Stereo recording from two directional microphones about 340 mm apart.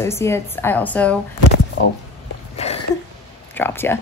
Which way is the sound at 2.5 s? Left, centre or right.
Centre.